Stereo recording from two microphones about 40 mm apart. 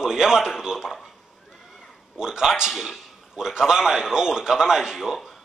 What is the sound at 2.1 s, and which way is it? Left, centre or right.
Speech, centre.